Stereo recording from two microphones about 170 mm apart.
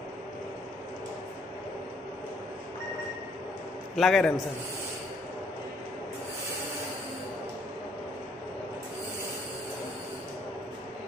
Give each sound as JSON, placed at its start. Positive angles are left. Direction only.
{"t": 3.9, "sound": "a man's voice", "side_deg": 0}